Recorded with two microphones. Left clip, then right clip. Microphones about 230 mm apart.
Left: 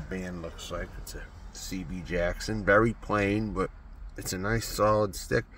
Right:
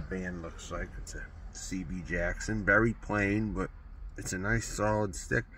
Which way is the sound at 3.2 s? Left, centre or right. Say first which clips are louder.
Even; centre.